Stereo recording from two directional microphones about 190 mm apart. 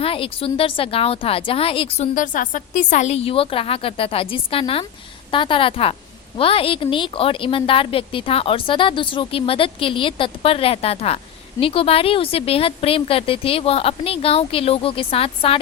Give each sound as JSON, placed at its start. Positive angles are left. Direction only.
{"t": 0.0, "sound": "a woman's voice", "side_deg": 30}